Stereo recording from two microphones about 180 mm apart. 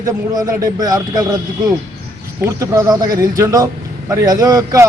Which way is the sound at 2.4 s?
15° right (ahead or behind).